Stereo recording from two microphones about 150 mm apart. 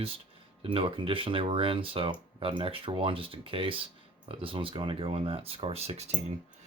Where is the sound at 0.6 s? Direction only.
35° right (ahead or behind).